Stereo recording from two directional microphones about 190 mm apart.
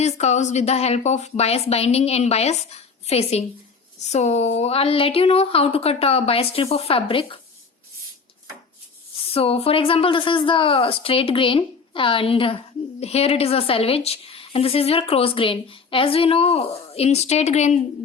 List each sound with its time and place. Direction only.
0.0 s a woman's voice: 35° left (ahead or behind)
9.3 s speech: 30° left (ahead or behind)